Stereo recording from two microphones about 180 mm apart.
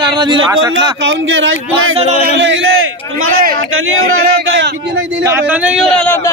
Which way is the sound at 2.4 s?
90° right.